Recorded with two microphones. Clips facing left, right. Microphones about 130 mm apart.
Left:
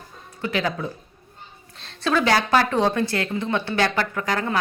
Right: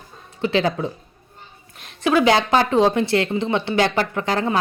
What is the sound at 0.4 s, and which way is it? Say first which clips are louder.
Speech: right 5 dB; 25° right (ahead or behind).